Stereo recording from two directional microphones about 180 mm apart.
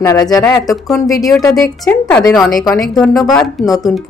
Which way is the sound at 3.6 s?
20° left (ahead or behind).